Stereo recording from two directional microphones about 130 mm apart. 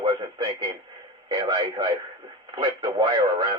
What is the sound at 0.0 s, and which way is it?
Radio, 35° right (ahead or behind).